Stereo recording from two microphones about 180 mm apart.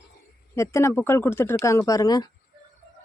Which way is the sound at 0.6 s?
15° left (ahead or behind).